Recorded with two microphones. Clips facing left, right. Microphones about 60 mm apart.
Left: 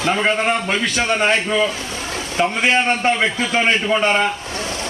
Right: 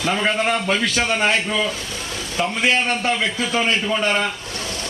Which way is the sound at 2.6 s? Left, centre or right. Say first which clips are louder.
Left 2 dB; left.